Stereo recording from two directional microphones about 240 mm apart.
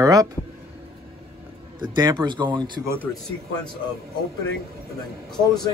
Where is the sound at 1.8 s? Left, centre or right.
Centre.